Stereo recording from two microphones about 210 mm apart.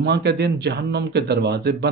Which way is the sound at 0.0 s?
50° right (ahead or behind).